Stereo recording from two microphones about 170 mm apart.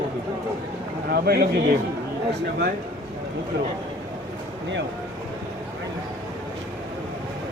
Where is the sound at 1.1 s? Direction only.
65° right (ahead or behind).